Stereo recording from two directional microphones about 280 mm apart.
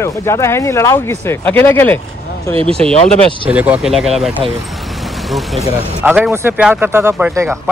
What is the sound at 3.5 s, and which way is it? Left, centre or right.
Speech, centre.